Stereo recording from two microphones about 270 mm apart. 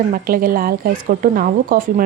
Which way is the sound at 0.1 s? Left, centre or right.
Right.